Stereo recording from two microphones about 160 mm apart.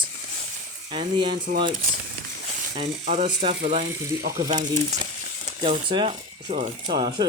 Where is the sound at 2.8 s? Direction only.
50° right (ahead or behind).